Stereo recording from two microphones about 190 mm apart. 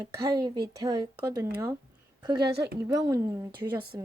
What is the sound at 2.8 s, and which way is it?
Speech, 20° right (ahead or behind).